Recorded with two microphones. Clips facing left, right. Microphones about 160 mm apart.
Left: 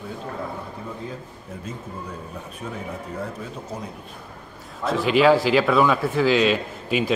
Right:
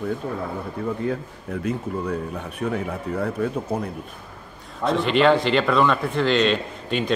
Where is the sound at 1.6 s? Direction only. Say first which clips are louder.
Right 9 dB; 70° right (ahead or behind).